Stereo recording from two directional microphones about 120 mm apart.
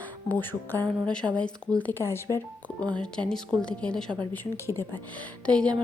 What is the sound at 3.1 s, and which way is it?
Speech, 5° left (ahead or behind).